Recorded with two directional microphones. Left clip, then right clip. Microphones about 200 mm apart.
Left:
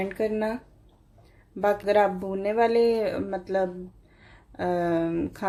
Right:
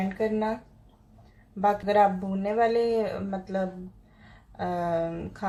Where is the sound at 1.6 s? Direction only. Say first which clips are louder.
Even; 40° left (ahead or behind).